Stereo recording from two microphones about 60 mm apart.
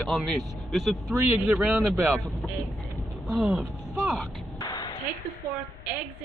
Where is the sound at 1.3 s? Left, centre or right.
Right.